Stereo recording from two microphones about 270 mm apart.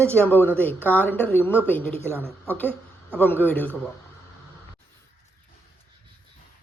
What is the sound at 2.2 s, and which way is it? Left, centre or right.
Speech, centre.